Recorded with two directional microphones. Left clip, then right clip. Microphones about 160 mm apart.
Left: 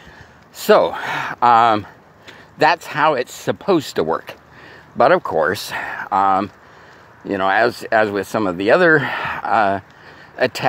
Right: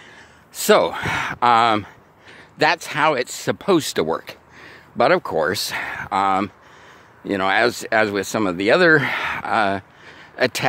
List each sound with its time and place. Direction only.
0.6 s speech: 40° right (ahead or behind)